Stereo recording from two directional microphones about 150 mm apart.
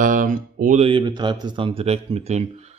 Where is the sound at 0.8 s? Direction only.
30° right (ahead or behind).